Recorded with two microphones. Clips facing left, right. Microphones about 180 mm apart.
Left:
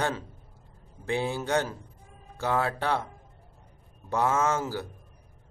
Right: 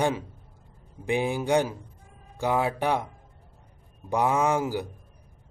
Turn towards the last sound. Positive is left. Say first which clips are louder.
# right 3 dB
turn(degrees=-15)  # may be behind; listen again after turning